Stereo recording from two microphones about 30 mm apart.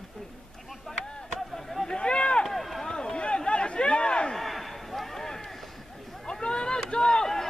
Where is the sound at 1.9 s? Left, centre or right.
Left.